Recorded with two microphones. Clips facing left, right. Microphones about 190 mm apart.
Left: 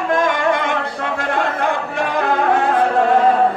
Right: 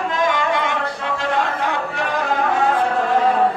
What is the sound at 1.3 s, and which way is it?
Music, 50° left (ahead or behind).